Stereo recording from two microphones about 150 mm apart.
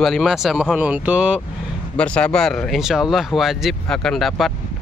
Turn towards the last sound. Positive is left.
turn(degrees=0)  # may be behind; listen again after turning